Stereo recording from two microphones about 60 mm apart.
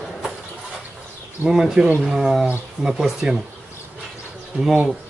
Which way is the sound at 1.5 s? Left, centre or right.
Centre.